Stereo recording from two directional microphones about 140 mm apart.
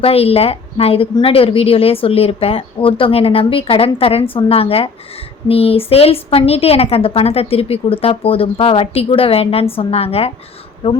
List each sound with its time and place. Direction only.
0.0 s a woman's voice: 45° left (ahead or behind)